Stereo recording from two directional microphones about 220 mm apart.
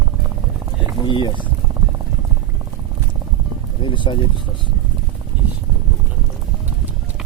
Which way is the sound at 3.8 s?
20° left (ahead or behind).